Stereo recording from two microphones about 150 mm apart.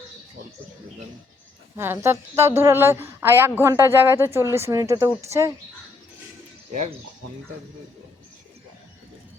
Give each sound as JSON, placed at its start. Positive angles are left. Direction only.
{"t": 1.7, "sound": "a woman's voice", "side_deg": -15}